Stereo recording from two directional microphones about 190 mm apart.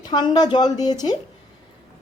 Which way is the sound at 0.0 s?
20° left (ahead or behind).